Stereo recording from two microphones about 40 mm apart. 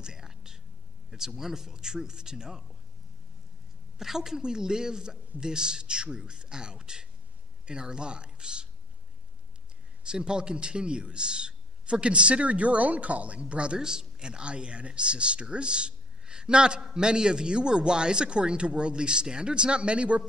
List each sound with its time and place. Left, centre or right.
0.0 s whispering: centre
1.1 s speech: centre
4.0 s a man's voice: centre
10.0 s a man's voice: right